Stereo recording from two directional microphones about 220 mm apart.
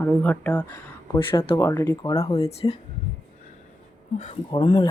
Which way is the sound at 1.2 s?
25° left (ahead or behind).